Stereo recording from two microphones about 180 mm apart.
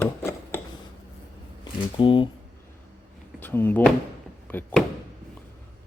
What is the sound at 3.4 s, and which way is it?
Speech, 10° left (ahead or behind).